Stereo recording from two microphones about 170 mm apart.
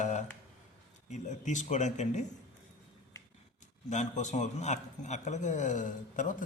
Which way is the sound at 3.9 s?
45° left (ahead or behind).